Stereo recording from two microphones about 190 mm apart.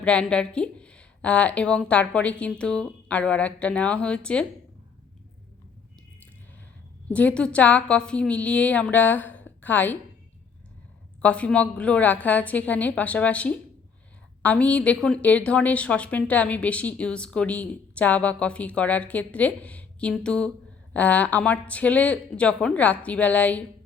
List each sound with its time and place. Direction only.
0.0 s speech: 5° left (ahead or behind)
7.1 s a woman's voice: 5° left (ahead or behind)
11.2 s a woman's voice: 5° left (ahead or behind)